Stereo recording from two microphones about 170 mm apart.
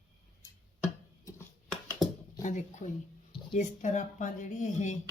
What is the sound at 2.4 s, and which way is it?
Speech, 45° left (ahead or behind).